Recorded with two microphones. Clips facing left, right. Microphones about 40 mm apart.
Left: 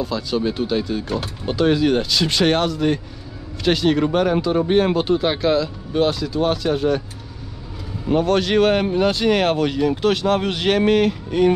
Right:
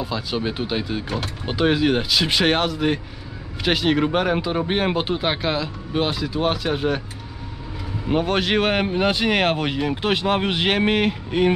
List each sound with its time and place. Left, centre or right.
0.0 s speech: centre
8.1 s speech: centre